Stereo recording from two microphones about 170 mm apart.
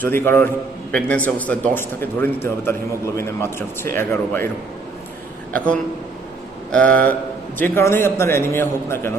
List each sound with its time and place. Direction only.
0.0 s a man's voice: 15° left (ahead or behind)
6.7 s a man's voice: 5° left (ahead or behind)